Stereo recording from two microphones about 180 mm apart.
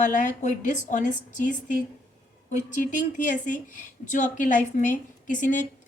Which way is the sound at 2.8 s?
45° left (ahead or behind).